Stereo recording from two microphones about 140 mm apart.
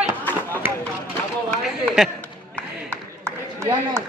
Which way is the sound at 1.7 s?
5° right (ahead or behind).